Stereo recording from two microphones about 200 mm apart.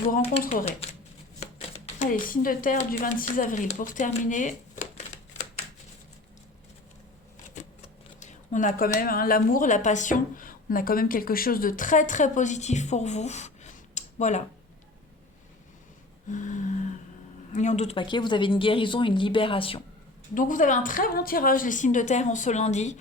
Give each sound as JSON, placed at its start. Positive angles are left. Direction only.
{"t": 0.4, "sound": "a woman's voice", "side_deg": 35}
{"t": 7.5, "sound": "speech", "side_deg": 35}
{"t": 16.3, "sound": "a woman's voice", "side_deg": 40}
{"t": 20.3, "sound": "a woman's voice", "side_deg": 40}